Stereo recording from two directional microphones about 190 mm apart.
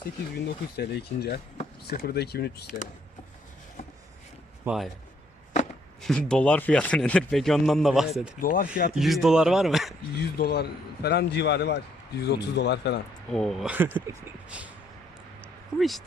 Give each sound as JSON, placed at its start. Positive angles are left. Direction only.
{"t": 0.3, "sound": "a man's voice", "side_deg": 60}
{"t": 4.6, "sound": "speech", "side_deg": -5}
{"t": 6.0, "sound": "speech", "side_deg": 5}
{"t": 8.4, "sound": "speech", "side_deg": 50}
{"t": 9.0, "sound": "speech", "side_deg": 0}
{"t": 10.3, "sound": "a man's voice", "side_deg": 55}
{"t": 13.3, "sound": "speech", "side_deg": 0}
{"t": 15.8, "sound": "speech", "side_deg": 0}